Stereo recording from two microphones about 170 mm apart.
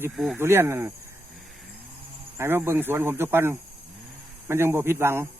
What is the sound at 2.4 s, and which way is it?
Speech, 15° right (ahead or behind).